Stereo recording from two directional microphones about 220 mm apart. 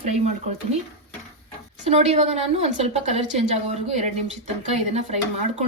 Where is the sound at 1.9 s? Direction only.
30° right (ahead or behind).